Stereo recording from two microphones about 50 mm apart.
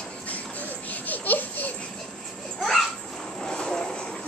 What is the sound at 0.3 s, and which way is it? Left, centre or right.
Music, left.